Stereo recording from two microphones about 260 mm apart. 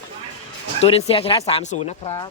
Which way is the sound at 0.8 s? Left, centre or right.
Left.